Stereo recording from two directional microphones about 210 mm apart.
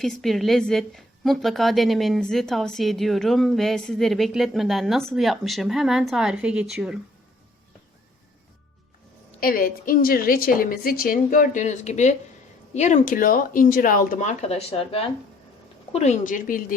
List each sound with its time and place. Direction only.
0.0 s a woman's voice: centre (ahead or behind)
9.4 s a woman's voice: 45° left (ahead or behind)